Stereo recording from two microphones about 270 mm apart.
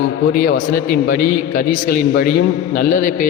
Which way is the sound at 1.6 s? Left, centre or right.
Left.